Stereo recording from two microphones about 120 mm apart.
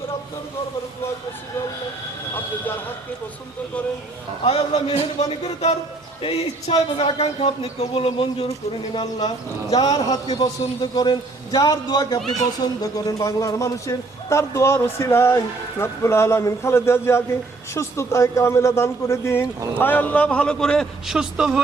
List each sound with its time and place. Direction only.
4.4 s speech: 60° left (ahead or behind)
6.2 s speech: 55° left (ahead or behind)
9.7 s a man's voice: 35° left (ahead or behind); by 21.6 s 5° right (ahead or behind)